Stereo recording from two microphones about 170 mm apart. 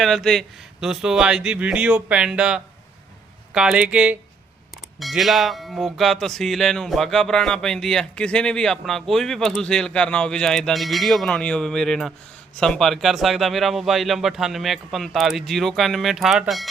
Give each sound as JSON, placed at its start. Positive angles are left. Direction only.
{"t": 0.0, "sound": "speech", "side_deg": 0}